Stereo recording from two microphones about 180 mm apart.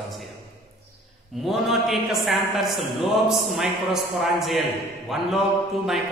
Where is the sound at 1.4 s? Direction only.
Centre (ahead or behind).